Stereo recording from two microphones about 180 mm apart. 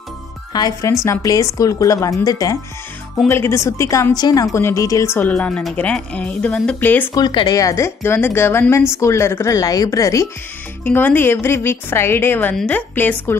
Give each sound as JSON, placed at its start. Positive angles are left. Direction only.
{"t": 0.5, "sound": "speech", "side_deg": 20}
{"t": 7.2, "sound": "speech", "side_deg": 20}